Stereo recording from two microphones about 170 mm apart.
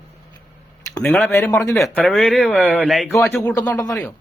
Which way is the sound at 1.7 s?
Centre (ahead or behind).